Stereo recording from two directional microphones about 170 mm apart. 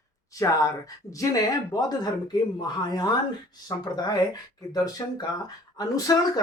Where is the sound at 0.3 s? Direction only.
20° left (ahead or behind).